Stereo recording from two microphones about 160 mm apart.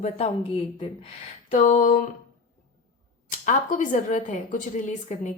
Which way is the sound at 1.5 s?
50° left (ahead or behind).